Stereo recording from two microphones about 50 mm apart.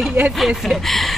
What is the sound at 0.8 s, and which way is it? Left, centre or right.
Speech, centre.